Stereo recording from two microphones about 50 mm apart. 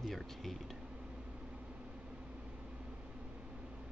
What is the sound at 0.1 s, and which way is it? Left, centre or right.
Speech, centre.